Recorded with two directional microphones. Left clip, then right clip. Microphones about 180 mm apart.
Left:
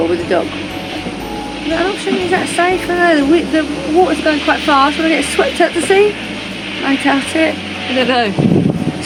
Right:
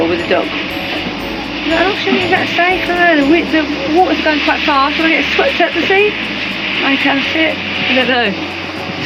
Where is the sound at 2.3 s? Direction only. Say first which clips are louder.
Even; 5° left (ahead or behind).